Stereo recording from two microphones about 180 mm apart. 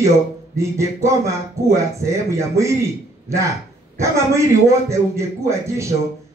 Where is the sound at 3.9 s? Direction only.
15° right (ahead or behind).